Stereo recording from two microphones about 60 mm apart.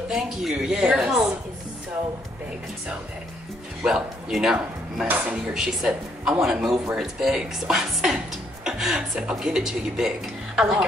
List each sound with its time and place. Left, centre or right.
0.1 s speech: centre
3.8 s speech: centre